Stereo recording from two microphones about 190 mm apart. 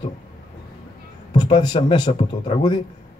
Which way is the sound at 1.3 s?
25° left (ahead or behind).